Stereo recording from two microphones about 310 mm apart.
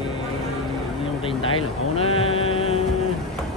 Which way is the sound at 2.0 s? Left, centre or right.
Centre.